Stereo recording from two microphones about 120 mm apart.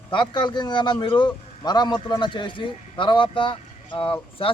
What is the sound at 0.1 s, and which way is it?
Speech, 40° left (ahead or behind).